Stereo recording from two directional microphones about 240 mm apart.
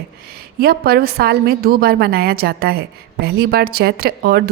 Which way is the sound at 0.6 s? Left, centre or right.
Right.